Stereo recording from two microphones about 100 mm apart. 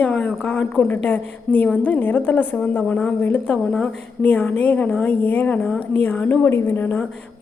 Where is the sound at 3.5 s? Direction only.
5° left (ahead or behind).